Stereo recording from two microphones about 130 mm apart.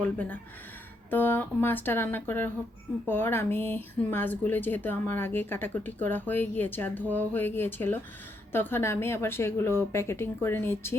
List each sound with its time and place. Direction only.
0.0 s a woman's voice: 10° left (ahead or behind)